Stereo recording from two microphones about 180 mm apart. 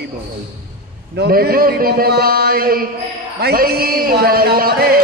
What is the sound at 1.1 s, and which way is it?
A man's voice, 60° right (ahead or behind).